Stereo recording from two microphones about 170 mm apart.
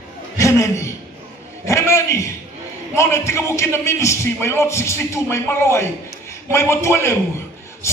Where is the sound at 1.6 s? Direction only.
15° left (ahead or behind).